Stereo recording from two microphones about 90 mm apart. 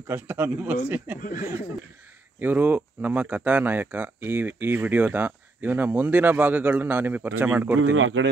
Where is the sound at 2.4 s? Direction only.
20° right (ahead or behind).